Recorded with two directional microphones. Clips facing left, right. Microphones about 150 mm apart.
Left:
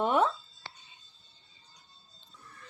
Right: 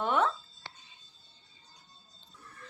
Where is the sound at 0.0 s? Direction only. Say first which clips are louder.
Left 2 dB; 15° left (ahead or behind).